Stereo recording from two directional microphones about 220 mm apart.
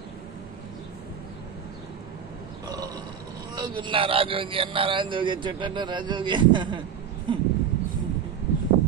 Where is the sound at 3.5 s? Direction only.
20° right (ahead or behind).